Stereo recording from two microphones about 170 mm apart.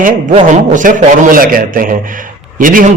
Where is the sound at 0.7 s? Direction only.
50° right (ahead or behind).